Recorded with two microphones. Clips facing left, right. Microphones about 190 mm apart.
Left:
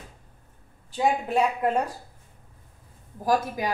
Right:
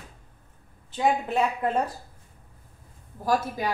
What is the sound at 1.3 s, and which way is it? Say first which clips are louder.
Speech: left 2 dB; 10° left (ahead or behind).